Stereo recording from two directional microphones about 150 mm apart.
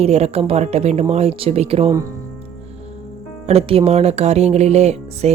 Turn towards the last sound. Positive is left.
turn(degrees=-45)  # may be behind; listen again after turning